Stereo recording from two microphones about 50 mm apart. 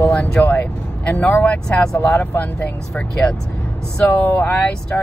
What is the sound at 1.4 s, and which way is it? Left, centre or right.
Speech, centre.